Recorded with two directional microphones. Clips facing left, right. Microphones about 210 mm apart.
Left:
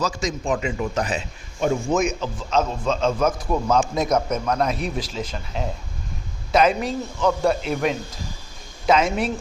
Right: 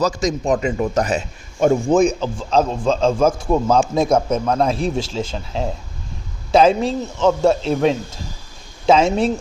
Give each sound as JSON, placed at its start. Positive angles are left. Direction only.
{"t": 0.0, "sound": "speech", "side_deg": -40}
{"t": 1.9, "sound": "a man's voice", "side_deg": -30}